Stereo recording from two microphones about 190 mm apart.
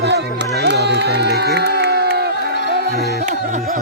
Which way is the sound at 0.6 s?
60° right (ahead or behind).